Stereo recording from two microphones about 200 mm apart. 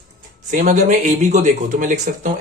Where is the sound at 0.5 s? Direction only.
40° right (ahead or behind).